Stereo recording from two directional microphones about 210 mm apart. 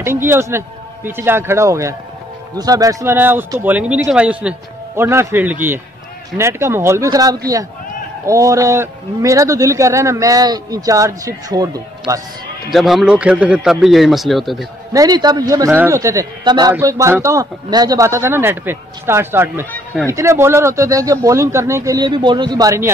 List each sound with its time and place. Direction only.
0.0 s a man's voice: 10° right (ahead or behind)
12.7 s a man's voice: centre (ahead or behind)
14.9 s a man's voice: 20° right (ahead or behind)